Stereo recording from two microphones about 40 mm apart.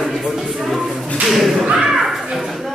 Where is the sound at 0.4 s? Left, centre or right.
Centre.